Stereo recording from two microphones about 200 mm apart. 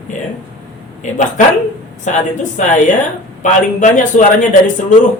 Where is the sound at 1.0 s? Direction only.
40° left (ahead or behind).